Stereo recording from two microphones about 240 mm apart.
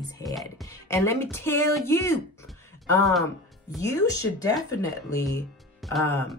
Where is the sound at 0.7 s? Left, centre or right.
Centre.